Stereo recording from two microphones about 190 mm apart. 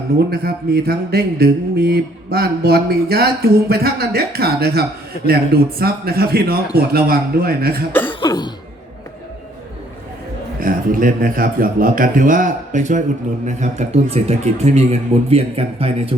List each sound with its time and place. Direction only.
0.3 s a sound: 55° right (ahead or behind)
6.7 s a man's voice: 50° right (ahead or behind)
8.2 s throat clearing: 20° left (ahead or behind)
10.6 s a man's voice: 50° right (ahead or behind); by 16.1 s 30° right (ahead or behind)